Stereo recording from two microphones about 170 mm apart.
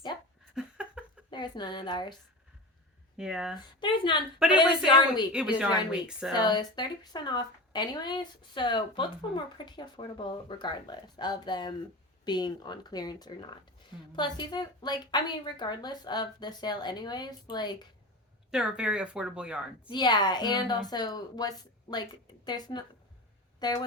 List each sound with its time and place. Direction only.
0.5 s a sound: 5° right (ahead or behind)
1.3 s a woman's voice: 25° left (ahead or behind)
3.2 s speech: 5° right (ahead or behind)
3.8 s speech: 30° left (ahead or behind)
4.4 s speech: 5° right (ahead or behind)
4.9 s speech: 25° left (ahead or behind)
5.3 s speech: 5° right (ahead or behind)
6.3 s speech: 25° left (ahead or behind)
18.5 s speech: 5° right (ahead or behind)
19.9 s speech: 25° left (ahead or behind)